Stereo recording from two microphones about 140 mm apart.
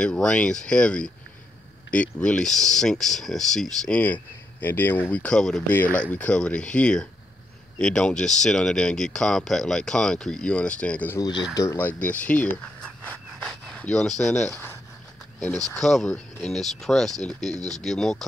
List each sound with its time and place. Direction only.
0.0 s speech: 5° left (ahead or behind)
11.1 s speech: 30° left (ahead or behind)
12.0 s speech: 10° left (ahead or behind)
15.7 s speech: 5° left (ahead or behind)